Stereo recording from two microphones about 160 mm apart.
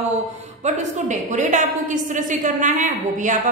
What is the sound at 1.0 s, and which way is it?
A woman's voice, 50° right (ahead or behind).